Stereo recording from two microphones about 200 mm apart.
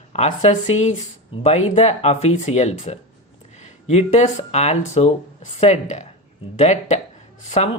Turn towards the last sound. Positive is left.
turn(degrees=35)  # may be behind; listen again after turning